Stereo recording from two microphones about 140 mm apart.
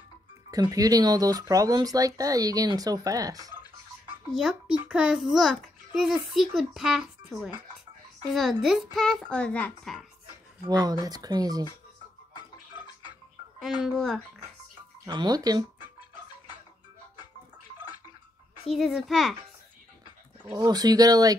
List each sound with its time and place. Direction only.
0.5 s speech: 25° right (ahead or behind)
4.3 s speech: 5° right (ahead or behind)
10.7 s speech: 25° right (ahead or behind)
12.4 s music: 30° left (ahead or behind)
13.8 s speech: centre (ahead or behind)
15.0 s speech: 30° right (ahead or behind)
18.7 s speech: centre (ahead or behind)
20.5 s speech: 30° right (ahead or behind)